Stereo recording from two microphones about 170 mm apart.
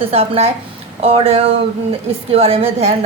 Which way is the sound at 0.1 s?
40° right (ahead or behind).